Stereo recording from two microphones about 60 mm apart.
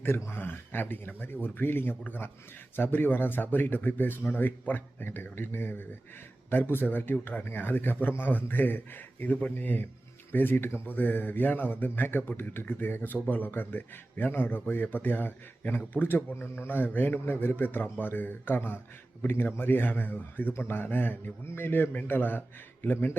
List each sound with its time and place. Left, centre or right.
0.3 s speech: left